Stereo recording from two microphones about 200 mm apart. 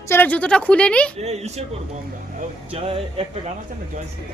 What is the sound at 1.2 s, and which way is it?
Speech, 35° right (ahead or behind).